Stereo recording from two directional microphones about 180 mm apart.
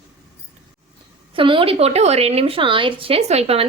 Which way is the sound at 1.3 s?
30° right (ahead or behind).